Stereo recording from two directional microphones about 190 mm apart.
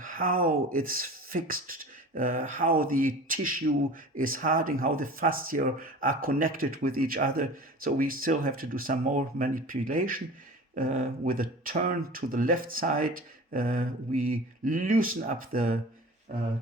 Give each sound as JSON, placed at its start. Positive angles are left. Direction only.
{"t": 0.0, "sound": "speech", "side_deg": -45}